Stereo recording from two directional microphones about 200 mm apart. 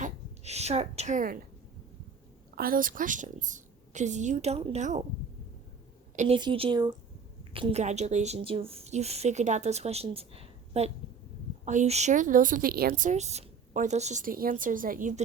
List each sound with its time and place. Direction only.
0.0 s a woman's voice: 35° right (ahead or behind)
2.6 s speech: 45° right (ahead or behind)
6.1 s speech: 30° right (ahead or behind)